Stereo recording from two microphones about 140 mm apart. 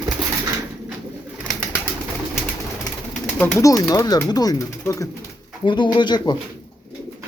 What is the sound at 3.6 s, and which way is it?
Speech, 25° left (ahead or behind).